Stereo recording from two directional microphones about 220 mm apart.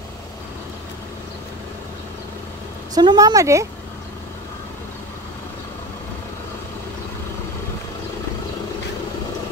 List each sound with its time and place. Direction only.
2.9 s a woman's voice: 20° right (ahead or behind)